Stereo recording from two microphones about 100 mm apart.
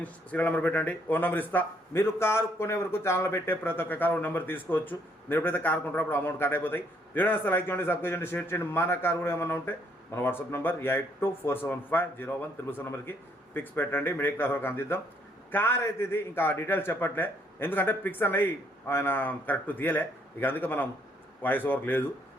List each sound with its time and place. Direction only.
0.0 s speech: 15° left (ahead or behind)